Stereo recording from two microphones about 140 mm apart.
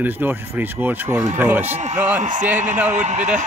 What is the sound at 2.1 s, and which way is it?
Speech, 65° right (ahead or behind).